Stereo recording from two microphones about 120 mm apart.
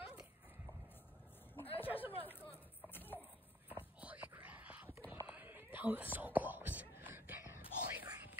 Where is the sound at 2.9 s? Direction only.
15° left (ahead or behind).